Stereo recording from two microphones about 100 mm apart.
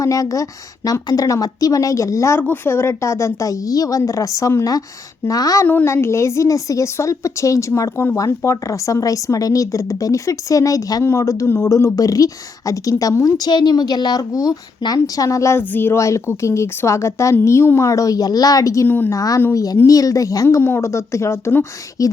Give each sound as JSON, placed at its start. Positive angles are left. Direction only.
{"t": 0.0, "sound": "speech", "side_deg": 35}
{"t": 5.6, "sound": "a woman's voice", "side_deg": 20}
{"t": 18.9, "sound": "a woman's voice", "side_deg": 20}
{"t": 19.1, "sound": "a woman's voice", "side_deg": 35}